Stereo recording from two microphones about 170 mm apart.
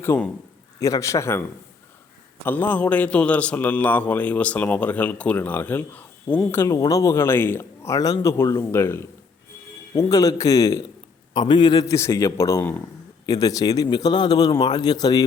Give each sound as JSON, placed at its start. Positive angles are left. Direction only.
{"t": 0.0, "sound": "a man's voice", "side_deg": 15}